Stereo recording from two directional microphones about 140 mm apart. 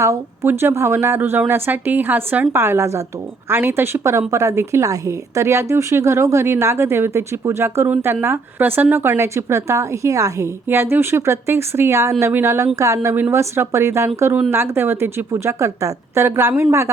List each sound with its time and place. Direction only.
0.0 s a woman's voice: 20° right (ahead or behind)